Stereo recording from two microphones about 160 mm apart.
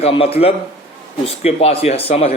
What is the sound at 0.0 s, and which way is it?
Speech, 35° left (ahead or behind).